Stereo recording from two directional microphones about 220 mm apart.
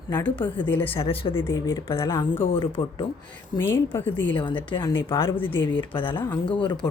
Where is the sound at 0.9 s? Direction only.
25° left (ahead or behind).